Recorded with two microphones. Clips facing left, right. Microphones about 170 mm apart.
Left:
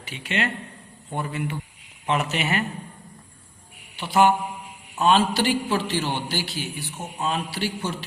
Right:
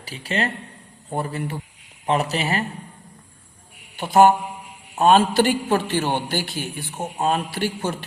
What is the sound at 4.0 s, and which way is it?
A man's voice, 45° right (ahead or behind).